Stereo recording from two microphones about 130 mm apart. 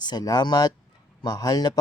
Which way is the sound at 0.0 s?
30° left (ahead or behind).